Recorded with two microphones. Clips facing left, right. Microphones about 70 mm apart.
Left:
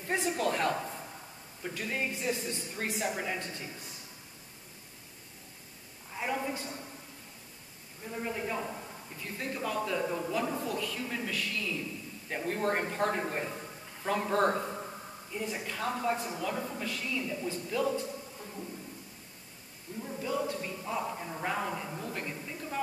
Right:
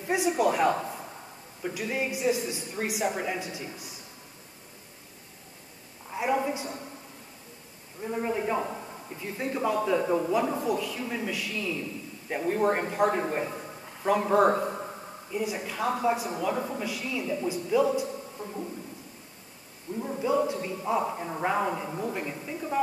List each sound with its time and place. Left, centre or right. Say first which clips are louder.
0.0 s a man's voice: right 6 dB; centre
6.1 s a man's voice: right 7 dB; centre
8.0 s a man's voice: right 7 dB; right
15.3 s a man's voice: right 5 dB; centre
20.0 s a woman's voice: right 7 dB; right